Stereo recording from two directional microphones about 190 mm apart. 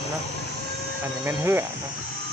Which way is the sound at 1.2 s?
10° right (ahead or behind).